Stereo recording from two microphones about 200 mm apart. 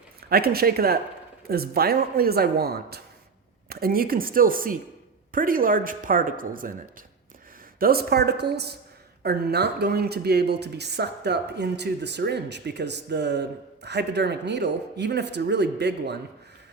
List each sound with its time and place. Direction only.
0.3 s speech: 50° right (ahead or behind)
7.8 s speech: 50° right (ahead or behind)